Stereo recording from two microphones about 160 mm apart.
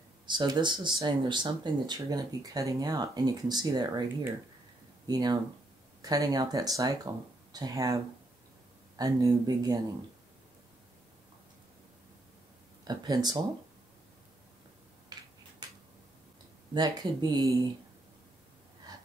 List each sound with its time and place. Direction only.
0.3 s speech: 30° right (ahead or behind)
5.0 s speech: 25° right (ahead or behind)
12.8 s speech: 25° right (ahead or behind)
15.6 s a sound: 25° right (ahead or behind)
16.7 s speech: 25° right (ahead or behind)
18.9 s gasp: 25° right (ahead or behind)